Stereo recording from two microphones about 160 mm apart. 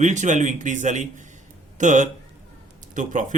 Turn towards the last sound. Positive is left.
turn(degrees=-50)  # may be behind; listen again after turning